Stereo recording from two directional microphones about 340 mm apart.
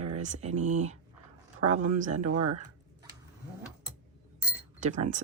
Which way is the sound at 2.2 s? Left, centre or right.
Right.